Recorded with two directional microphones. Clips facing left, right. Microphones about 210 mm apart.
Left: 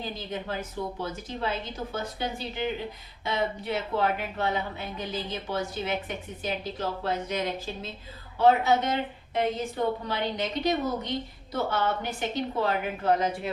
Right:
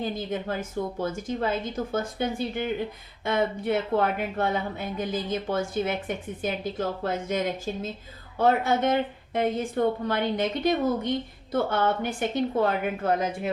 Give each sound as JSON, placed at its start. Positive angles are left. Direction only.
{"t": 0.2, "sound": "speech", "side_deg": -50}